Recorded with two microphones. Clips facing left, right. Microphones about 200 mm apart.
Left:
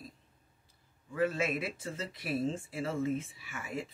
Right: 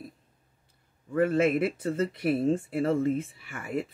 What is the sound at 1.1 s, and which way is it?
Speech, 55° right (ahead or behind).